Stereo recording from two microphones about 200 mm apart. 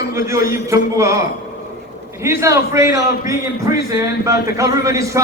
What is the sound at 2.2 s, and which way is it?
A man's voice, 15° right (ahead or behind).